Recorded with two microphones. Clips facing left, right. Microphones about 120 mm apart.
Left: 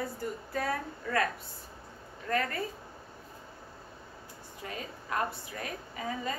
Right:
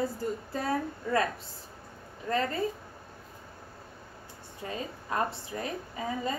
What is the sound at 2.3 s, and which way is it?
Speech, 25° right (ahead or behind).